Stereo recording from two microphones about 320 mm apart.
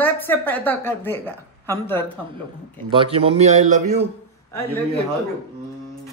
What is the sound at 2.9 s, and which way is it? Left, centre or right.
A man's voice, centre.